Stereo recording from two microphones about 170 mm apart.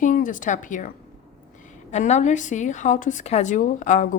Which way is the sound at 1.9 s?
40° left (ahead or behind).